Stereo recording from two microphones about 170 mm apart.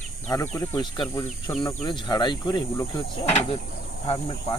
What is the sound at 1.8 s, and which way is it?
Speech, 25° left (ahead or behind).